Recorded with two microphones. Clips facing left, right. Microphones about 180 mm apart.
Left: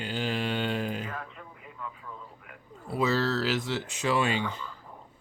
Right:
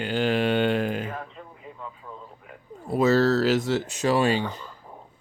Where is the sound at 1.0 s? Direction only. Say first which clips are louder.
Right 4 dB; 25° right (ahead or behind).